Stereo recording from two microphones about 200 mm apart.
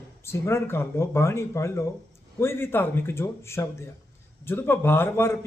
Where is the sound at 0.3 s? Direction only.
15° left (ahead or behind).